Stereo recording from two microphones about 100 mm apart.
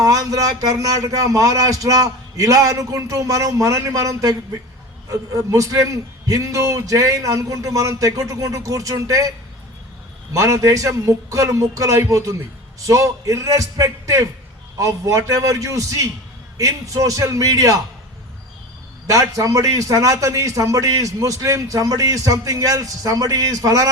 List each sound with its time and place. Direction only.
0.0 s a man's voice: 35° right (ahead or behind)
10.3 s a man's voice: 30° right (ahead or behind)
19.0 s a man's voice: 35° right (ahead or behind)